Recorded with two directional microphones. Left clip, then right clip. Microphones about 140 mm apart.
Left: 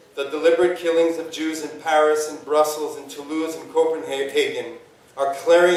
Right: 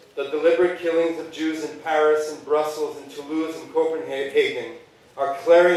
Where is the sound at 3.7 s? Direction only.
45° left (ahead or behind).